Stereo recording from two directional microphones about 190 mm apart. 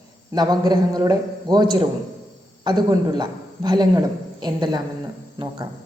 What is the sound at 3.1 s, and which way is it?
A man's voice, 20° right (ahead or behind).